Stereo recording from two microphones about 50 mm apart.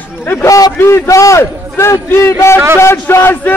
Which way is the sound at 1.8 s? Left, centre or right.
Left.